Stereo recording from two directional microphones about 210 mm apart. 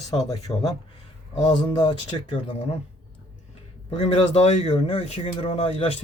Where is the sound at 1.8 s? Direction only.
25° left (ahead or behind).